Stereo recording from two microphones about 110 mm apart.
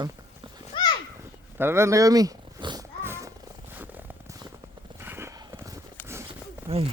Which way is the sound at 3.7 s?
15° right (ahead or behind).